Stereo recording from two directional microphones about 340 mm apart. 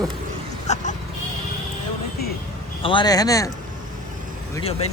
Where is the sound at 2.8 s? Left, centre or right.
Centre.